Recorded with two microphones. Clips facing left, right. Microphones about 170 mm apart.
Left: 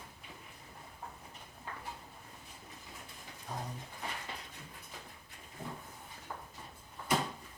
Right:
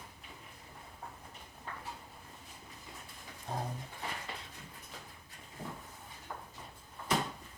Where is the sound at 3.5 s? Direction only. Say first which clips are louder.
Right 3 dB; 30° right (ahead or behind).